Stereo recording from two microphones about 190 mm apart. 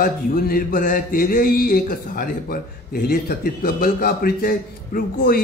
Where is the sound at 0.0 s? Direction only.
50° left (ahead or behind).